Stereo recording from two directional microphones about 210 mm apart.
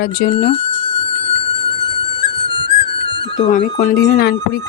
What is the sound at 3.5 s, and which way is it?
Speech, 40° left (ahead or behind).